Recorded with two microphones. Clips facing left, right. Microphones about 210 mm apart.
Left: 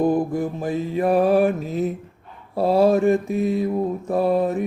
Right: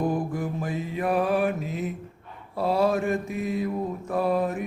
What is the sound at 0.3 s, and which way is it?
Mantra, 30° left (ahead or behind).